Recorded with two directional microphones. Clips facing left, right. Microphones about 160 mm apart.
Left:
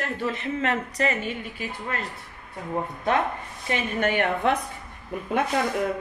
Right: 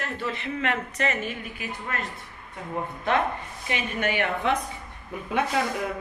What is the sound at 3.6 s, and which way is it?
Speech, 50° left (ahead or behind).